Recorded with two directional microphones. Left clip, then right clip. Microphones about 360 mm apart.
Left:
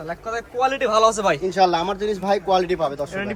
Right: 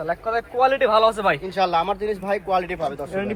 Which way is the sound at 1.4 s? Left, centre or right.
Left.